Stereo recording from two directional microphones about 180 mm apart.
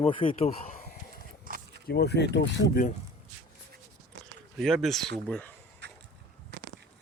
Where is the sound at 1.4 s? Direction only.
50° right (ahead or behind).